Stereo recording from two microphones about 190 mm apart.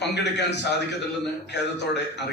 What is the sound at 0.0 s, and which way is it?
Speech, 65° left (ahead or behind).